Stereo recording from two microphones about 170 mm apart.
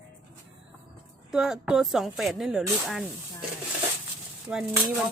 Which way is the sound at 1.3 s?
5° right (ahead or behind).